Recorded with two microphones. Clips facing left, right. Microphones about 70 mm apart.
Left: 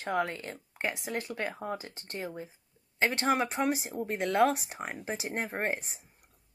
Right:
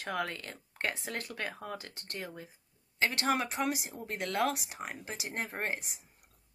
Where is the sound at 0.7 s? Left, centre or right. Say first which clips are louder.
Left 2 dB; centre; by 6.0 s left.